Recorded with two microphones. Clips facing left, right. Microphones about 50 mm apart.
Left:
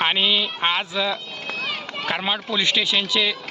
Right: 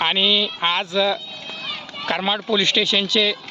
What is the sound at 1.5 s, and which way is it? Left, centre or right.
Run, left.